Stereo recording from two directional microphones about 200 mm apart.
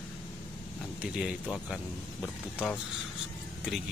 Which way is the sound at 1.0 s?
5° right (ahead or behind).